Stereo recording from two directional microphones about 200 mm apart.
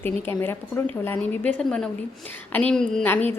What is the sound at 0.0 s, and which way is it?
A woman's voice, 10° left (ahead or behind).